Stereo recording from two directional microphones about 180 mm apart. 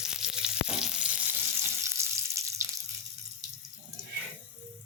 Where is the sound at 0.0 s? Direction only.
5° right (ahead or behind).